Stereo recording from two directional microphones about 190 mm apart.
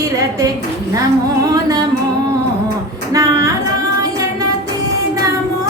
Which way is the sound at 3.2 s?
15° right (ahead or behind).